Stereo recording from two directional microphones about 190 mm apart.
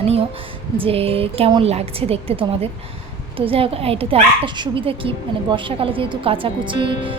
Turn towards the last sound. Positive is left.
turn(degrees=-25)  # may be behind; listen again after turning